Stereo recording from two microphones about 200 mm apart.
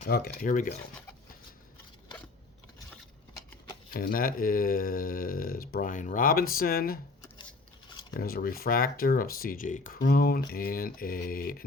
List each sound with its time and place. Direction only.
0.1 s speech: 50° left (ahead or behind)
3.9 s speech: 45° left (ahead or behind)
8.1 s speech: 50° left (ahead or behind)